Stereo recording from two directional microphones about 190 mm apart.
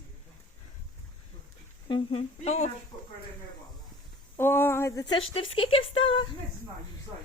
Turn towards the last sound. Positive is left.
turn(degrees=25)  # may be behind; listen again after turning